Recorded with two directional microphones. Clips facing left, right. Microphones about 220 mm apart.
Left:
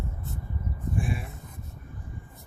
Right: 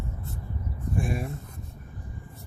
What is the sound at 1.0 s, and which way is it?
Speech, 45° right (ahead or behind).